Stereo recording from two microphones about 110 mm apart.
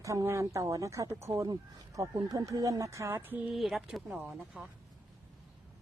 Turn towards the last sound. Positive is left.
turn(degrees=-10)  # may be behind; listen again after turning